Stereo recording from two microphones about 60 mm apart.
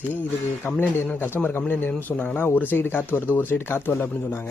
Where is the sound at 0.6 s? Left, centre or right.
Left.